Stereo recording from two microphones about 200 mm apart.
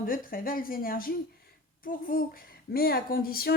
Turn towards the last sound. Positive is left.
turn(degrees=50)  # may be behind; listen again after turning